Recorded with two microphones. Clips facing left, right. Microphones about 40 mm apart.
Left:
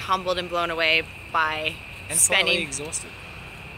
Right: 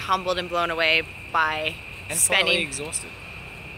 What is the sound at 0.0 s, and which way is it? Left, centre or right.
Speech, centre.